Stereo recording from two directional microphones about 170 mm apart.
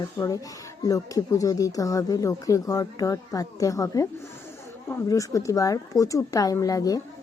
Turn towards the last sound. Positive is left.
turn(degrees=20)  # may be behind; listen again after turning